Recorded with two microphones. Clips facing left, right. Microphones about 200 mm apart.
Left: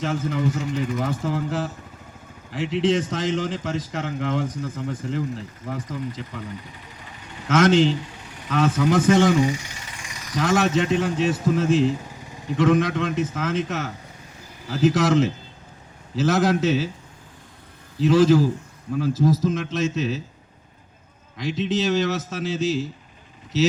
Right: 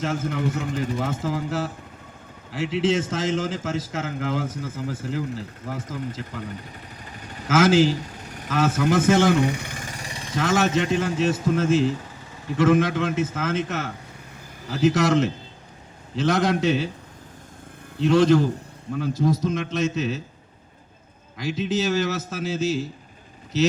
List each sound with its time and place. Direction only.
0.0 s speech: centre (ahead or behind)
0.9 s speech: 25° right (ahead or behind)
1.2 s speech: centre (ahead or behind)
7.4 s speech: 5° right (ahead or behind)
9.3 s vehicle: 60° right (ahead or behind); by 10.3 s 30° right (ahead or behind)
10.3 s speech: centre (ahead or behind)
18.0 s speech: centre (ahead or behind)
21.3 s speech: centre (ahead or behind)